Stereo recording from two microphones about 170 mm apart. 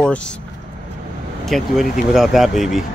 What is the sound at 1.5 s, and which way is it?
A man's voice, centre (ahead or behind).